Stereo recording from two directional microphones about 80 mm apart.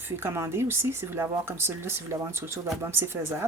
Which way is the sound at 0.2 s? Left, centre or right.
Right.